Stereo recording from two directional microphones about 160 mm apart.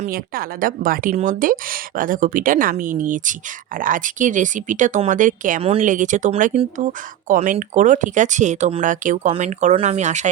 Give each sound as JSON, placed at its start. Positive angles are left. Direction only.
{"t": 0.0, "sound": "speech", "side_deg": -60}